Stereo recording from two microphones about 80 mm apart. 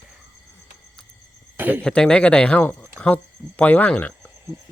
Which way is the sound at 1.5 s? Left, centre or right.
Right.